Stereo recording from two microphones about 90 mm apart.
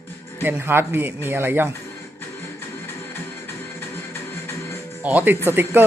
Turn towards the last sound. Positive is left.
turn(degrees=-25)  # may be behind; listen again after turning